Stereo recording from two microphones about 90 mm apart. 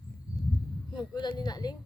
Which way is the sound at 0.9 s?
55° left (ahead or behind).